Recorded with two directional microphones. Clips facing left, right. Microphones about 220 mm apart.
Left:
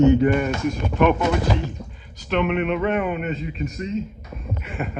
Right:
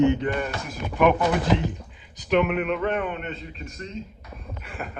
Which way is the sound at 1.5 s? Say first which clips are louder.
Right 3 dB; 20° right (ahead or behind).